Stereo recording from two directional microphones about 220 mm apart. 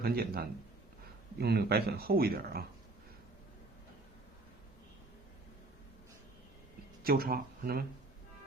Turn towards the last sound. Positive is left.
turn(degrees=-45)  # may be behind; listen again after turning